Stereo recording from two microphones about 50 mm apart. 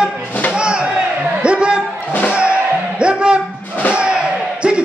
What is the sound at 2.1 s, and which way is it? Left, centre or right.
Music, left.